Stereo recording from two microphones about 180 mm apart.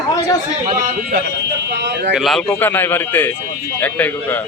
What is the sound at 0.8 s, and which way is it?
Speech, 50° right (ahead or behind).